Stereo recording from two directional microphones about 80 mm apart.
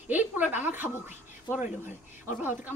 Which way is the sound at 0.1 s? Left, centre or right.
Right.